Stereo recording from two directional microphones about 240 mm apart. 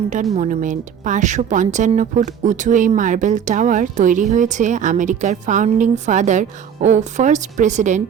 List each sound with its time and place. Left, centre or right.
0.3 s speech: right